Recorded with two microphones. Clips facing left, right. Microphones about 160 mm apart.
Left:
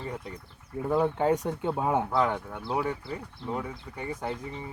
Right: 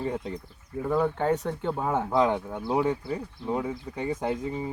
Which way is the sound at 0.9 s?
10° left (ahead or behind).